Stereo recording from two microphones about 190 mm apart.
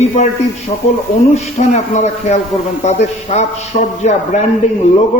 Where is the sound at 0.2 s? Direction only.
35° left (ahead or behind).